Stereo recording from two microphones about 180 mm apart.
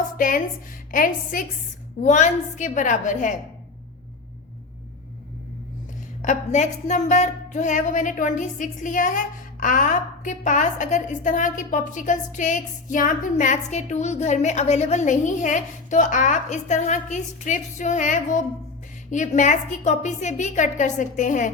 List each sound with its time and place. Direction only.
0.2 s speech: 50° left (ahead or behind)
6.2 s speech: 40° left (ahead or behind)